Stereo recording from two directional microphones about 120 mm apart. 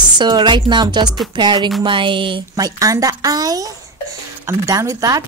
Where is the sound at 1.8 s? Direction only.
45° right (ahead or behind).